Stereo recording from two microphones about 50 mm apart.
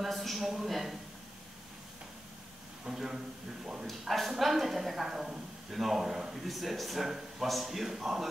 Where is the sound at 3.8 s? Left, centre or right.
Centre.